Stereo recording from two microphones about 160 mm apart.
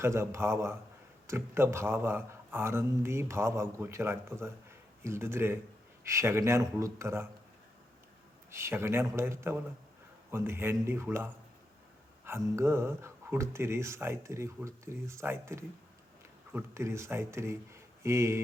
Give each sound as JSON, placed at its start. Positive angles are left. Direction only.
{"t": 0.0, "sound": "speech", "side_deg": -15}
{"t": 8.4, "sound": "speech", "side_deg": -15}
{"t": 12.5, "sound": "speech", "side_deg": -15}